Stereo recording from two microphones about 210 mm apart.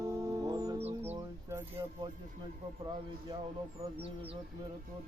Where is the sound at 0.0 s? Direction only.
15° right (ahead or behind).